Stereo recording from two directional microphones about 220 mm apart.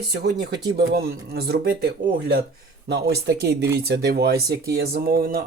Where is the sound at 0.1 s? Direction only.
50° right (ahead or behind).